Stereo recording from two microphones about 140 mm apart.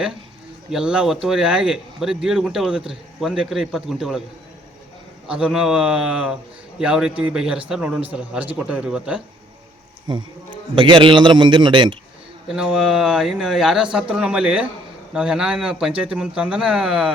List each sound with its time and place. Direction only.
0.7 s speech: 5° right (ahead or behind)
5.3 s a man's voice: 5° right (ahead or behind)
10.8 s a man's voice: 35° right (ahead or behind)
12.5 s speech: 5° right (ahead or behind)